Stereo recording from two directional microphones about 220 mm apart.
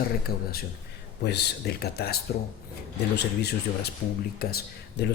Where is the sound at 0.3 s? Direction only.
45° left (ahead or behind).